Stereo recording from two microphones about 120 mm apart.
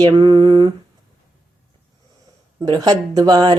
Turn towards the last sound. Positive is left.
turn(degrees=-35)  # may be behind; listen again after turning